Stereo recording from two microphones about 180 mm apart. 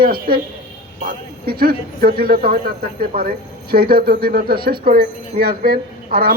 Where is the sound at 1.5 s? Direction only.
55° right (ahead or behind).